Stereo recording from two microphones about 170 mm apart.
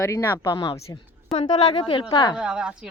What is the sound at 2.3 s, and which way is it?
Speech, 5° right (ahead or behind).